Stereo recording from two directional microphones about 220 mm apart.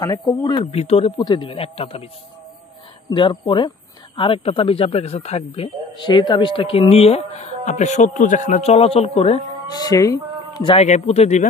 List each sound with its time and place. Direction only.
0.0 s speech: 20° left (ahead or behind)
3.1 s speech: 20° left (ahead or behind)